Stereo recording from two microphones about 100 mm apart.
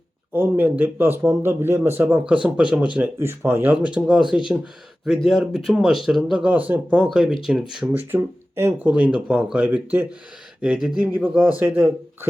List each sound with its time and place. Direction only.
0.3 s speech: 20° right (ahead or behind)
3.2 s speech: 25° right (ahead or behind); by 7.3 s 5° right (ahead or behind)
7.9 s speech: 20° right (ahead or behind)
8.9 s speech: 10° right (ahead or behind)
10.6 s speech: 5° right (ahead or behind)
11.1 s speech: 20° right (ahead or behind)